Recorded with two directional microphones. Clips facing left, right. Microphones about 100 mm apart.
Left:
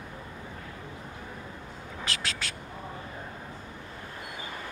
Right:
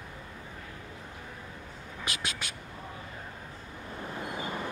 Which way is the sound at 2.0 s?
15° right (ahead or behind).